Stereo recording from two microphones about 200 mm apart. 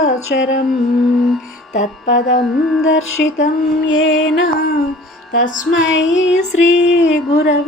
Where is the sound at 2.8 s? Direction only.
70° left (ahead or behind).